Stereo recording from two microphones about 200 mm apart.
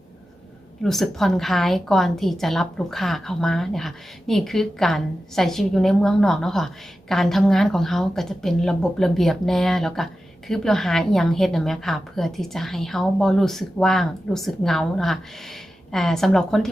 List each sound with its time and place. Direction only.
0.8 s a woman's voice: centre (ahead or behind)